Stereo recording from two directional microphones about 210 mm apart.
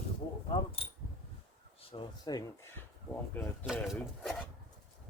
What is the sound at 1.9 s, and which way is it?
Speech, 20° left (ahead or behind).